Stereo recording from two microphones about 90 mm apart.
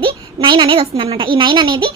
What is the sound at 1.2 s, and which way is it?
Speech, 70° right (ahead or behind).